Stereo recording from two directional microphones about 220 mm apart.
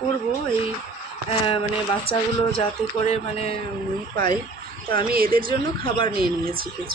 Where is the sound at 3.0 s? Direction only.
30° left (ahead or behind).